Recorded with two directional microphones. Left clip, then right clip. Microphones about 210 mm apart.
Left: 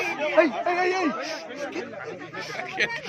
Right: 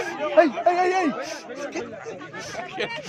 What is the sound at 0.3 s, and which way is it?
A man's voice, 50° right (ahead or behind).